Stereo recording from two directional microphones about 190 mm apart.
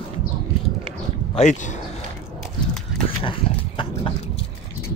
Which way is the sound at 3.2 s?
25° left (ahead or behind).